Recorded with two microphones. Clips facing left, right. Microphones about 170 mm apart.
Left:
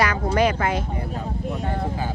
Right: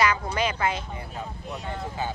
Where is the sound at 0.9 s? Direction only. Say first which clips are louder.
Left 7 dB; 40° left (ahead or behind).